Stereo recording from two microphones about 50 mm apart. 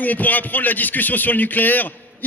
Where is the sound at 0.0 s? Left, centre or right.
Left.